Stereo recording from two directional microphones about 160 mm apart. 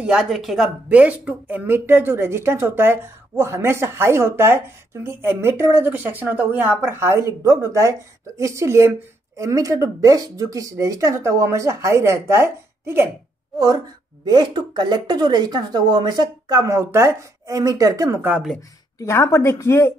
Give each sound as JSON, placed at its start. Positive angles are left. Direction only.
{"t": 0.0, "sound": "speech", "side_deg": -5}
{"t": 14.2, "sound": "speech", "side_deg": -25}
{"t": 18.9, "sound": "a woman's voice", "side_deg": 20}